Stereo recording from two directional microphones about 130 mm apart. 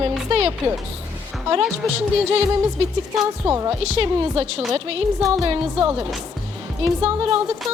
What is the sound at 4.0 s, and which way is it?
A woman's voice, 45° right (ahead or behind).